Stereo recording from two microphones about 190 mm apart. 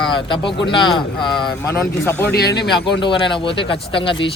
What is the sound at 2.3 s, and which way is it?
Speech, 60° left (ahead or behind).